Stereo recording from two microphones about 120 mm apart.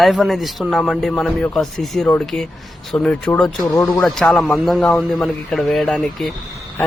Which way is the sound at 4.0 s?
5° left (ahead or behind).